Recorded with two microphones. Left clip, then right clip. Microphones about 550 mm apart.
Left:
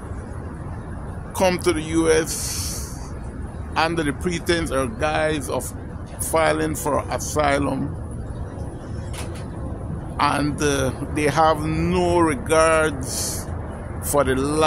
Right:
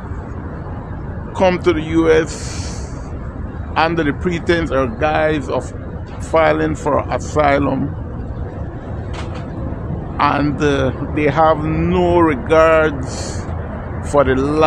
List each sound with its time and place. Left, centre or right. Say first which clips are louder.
1.4 s a man's voice: right 5 dB; left
3.7 s a man's voice: right 5 dB; left
10.1 s a man's voice: right 5 dB; left